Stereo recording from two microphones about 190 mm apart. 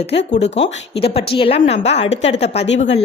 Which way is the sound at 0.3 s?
35° left (ahead or behind).